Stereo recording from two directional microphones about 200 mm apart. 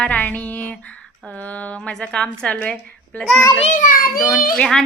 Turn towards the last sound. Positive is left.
turn(degrees=5)  # may be behind; listen again after turning